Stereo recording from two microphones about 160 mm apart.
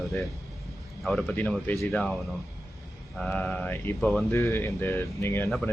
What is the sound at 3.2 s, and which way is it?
Speech, 10° left (ahead or behind).